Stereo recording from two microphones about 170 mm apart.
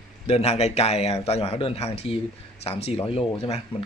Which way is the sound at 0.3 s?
40° left (ahead or behind).